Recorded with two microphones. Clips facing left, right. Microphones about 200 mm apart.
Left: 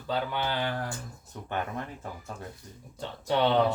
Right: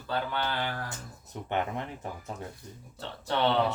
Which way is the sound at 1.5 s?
20° right (ahead or behind).